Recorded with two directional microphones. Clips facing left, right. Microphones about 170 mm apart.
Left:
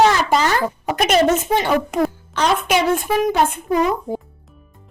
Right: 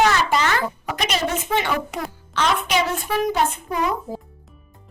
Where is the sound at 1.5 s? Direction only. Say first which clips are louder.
Left 5 dB; 40° left (ahead or behind).